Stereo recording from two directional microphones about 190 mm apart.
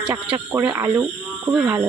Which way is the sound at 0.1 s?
20° right (ahead or behind).